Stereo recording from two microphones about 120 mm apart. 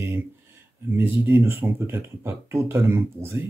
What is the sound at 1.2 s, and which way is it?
Speech, 20° right (ahead or behind).